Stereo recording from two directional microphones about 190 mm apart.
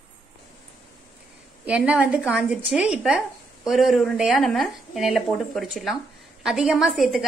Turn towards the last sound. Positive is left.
turn(degrees=0)  # may be behind; listen again after turning